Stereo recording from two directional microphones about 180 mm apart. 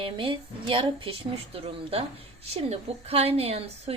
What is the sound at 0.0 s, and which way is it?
A woman's voice, 30° right (ahead or behind).